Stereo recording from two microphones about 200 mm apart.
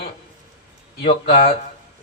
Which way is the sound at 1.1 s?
45° left (ahead or behind).